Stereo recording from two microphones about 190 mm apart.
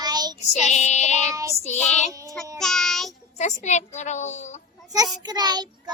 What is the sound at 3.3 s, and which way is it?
A woman's voice, 40° left (ahead or behind).